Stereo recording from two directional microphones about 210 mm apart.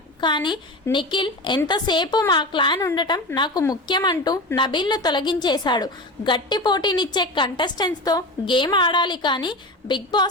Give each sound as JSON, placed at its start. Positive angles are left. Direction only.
{"t": 0.2, "sound": "a woman's voice", "side_deg": 20}